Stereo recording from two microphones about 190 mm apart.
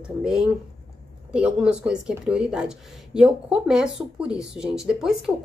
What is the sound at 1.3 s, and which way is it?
A woman's voice, 5° right (ahead or behind).